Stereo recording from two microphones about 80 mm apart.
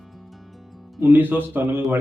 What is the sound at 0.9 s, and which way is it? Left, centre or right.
Speech, right.